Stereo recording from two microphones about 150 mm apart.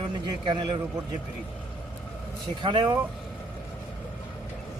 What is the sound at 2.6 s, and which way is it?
Speech, 30° right (ahead or behind).